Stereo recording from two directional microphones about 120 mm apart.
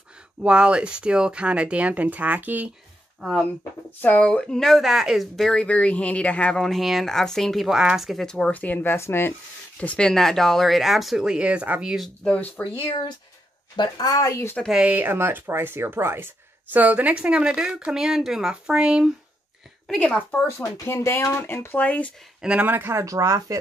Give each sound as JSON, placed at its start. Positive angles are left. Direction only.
{"t": 0.4, "sound": "speech", "side_deg": -10}
{"t": 3.2, "sound": "speech", "side_deg": 5}
{"t": 9.8, "sound": "speech", "side_deg": 10}
{"t": 12.6, "sound": "a woman's voice", "side_deg": 10}
{"t": 13.7, "sound": "speech", "side_deg": 35}
{"t": 14.6, "sound": "speech", "side_deg": -5}
{"t": 19.9, "sound": "a woman's voice", "side_deg": 10}
{"t": 20.4, "sound": "speech", "side_deg": 20}
{"t": 22.4, "sound": "speech", "side_deg": -10}